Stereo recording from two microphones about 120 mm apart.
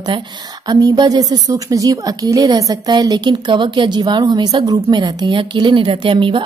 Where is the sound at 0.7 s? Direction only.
35° right (ahead or behind).